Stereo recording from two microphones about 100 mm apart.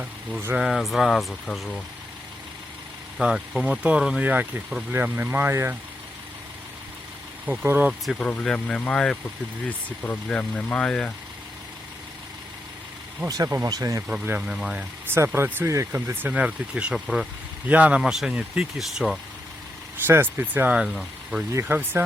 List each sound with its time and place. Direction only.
0.0 s speech: 15° right (ahead or behind)
0.6 s speech: centre (ahead or behind)
3.2 s speech: 5° right (ahead or behind); by 5.7 s 25° right (ahead or behind)
7.4 s speech: 15° right (ahead or behind)
7.9 s speech: 5° right (ahead or behind)
8.2 s speech: 10° left (ahead or behind)
13.2 s speech: 35° right (ahead or behind)
14.1 s speech: 15° right (ahead or behind)
15.0 s speech: 25° right (ahead or behind); by 19.2 s centre (ahead or behind)
20.1 s speech: 20° right (ahead or behind); by 21.4 s 5° right (ahead or behind)
21.5 s speech: 20° right (ahead or behind)